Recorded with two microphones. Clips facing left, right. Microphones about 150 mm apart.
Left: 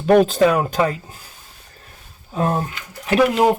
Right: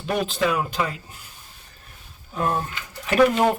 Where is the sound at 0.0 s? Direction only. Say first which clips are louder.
Left 10 dB; 45° left (ahead or behind).